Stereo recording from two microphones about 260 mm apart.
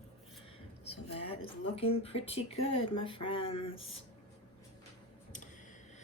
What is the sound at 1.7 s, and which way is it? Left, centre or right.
A woman's voice, left.